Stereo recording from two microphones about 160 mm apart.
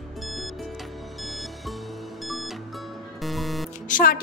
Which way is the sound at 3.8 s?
55° left (ahead or behind).